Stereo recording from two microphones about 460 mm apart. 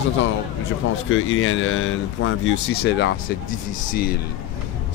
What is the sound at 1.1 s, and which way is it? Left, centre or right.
Speech, left.